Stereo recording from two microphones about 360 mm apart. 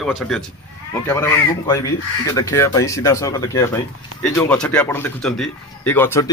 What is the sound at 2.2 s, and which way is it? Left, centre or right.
Speech, centre.